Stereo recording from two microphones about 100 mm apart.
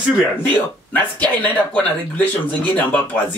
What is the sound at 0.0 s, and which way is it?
Speech, 10° right (ahead or behind).